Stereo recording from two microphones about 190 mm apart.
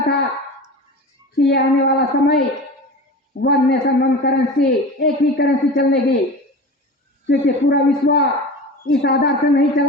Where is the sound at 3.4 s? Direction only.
60° left (ahead or behind).